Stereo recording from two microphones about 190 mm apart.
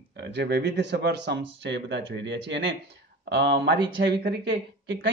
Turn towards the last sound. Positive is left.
turn(degrees=-60)  # may be behind; listen again after turning